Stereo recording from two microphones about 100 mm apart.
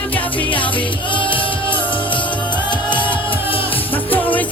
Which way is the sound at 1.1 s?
55° left (ahead or behind).